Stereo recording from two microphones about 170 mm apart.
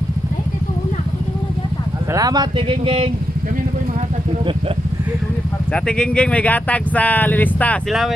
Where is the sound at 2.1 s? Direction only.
20° right (ahead or behind).